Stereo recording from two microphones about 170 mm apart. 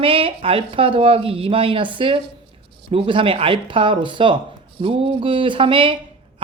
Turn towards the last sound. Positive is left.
turn(degrees=-30)  # may be behind; listen again after turning